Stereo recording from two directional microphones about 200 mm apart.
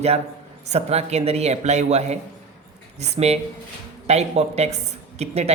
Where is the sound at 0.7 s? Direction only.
30° right (ahead or behind).